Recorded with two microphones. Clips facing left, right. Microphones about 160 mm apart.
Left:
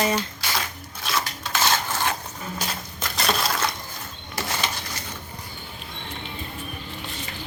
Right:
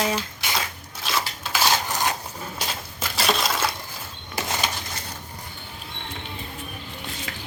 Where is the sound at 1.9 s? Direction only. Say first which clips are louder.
Right 1 dB; 15° right (ahead or behind).